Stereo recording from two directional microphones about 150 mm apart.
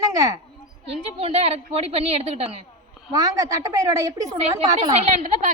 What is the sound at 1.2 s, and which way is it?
A woman's voice, 40° right (ahead or behind).